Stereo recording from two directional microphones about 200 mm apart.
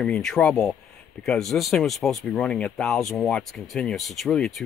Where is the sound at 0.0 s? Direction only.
5° left (ahead or behind).